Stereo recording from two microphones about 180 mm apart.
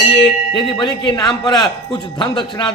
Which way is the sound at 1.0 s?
20° left (ahead or behind).